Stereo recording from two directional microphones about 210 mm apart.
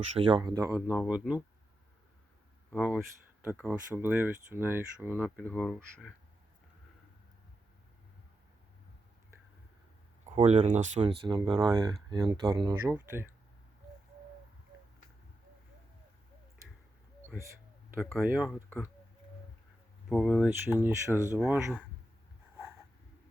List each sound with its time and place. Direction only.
0.2 s speech: 25° right (ahead or behind); by 1.4 s 5° right (ahead or behind)
2.6 s speech: 5° left (ahead or behind)
3.4 s speech: 10° right (ahead or behind)
5.2 s speech: 5° left (ahead or behind)
10.2 s speech: 30° right (ahead or behind)
11.2 s speech: 25° right (ahead or behind)
17.9 s speech: 5° right (ahead or behind)
20.1 s speech: centre (ahead or behind)